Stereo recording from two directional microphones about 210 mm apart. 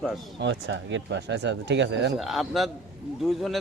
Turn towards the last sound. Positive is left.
turn(degrees=0)  # may be behind; listen again after turning